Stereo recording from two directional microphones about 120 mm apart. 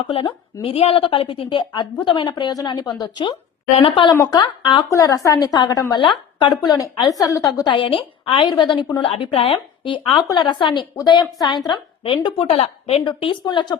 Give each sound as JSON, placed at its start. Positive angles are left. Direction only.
{"t": 0.1, "sound": "a woman's voice", "side_deg": 50}
{"t": 4.2, "sound": "a woman's voice", "side_deg": 35}